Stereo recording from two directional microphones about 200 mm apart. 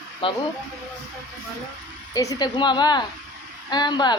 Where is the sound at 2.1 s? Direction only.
20° left (ahead or behind).